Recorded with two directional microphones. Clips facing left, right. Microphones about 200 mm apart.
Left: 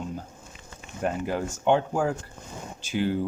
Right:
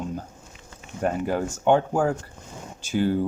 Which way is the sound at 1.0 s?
50° right (ahead or behind).